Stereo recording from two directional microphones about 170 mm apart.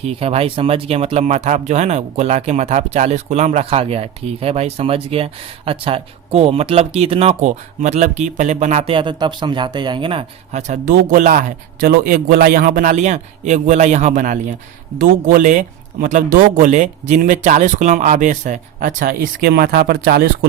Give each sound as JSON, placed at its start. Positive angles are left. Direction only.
{"t": 0.0, "sound": "speech", "side_deg": -35}
{"t": 11.1, "sound": "speech", "side_deg": -50}